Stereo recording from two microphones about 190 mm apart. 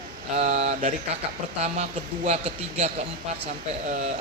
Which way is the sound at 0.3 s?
35° right (ahead or behind).